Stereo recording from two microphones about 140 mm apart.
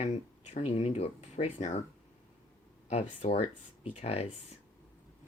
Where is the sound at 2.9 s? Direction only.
50° left (ahead or behind).